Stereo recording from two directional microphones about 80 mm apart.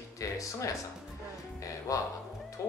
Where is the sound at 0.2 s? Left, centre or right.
Left.